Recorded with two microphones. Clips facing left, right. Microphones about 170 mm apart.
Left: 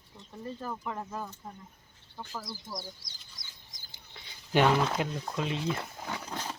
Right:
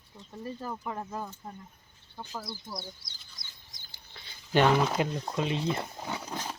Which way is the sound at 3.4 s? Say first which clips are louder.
Right 1 dB; 90° left.